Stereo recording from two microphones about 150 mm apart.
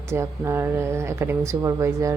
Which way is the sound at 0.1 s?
15° right (ahead or behind).